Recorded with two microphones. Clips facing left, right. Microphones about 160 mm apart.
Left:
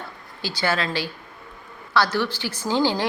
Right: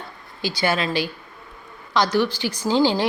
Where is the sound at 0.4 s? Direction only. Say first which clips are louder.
Right 2 dB; 15° right (ahead or behind).